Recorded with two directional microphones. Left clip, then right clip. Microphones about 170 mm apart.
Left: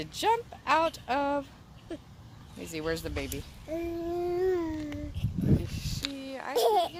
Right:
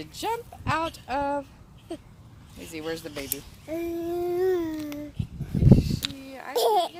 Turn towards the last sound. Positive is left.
turn(degrees=-40)  # may be behind; listen again after turning